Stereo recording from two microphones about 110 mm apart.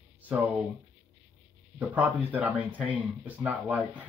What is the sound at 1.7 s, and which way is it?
Speech, 15° right (ahead or behind).